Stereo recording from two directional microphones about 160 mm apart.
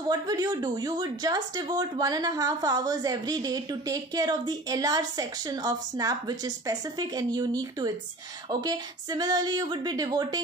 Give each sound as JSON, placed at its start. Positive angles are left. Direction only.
{"t": 0.1, "sound": "speech", "side_deg": -25}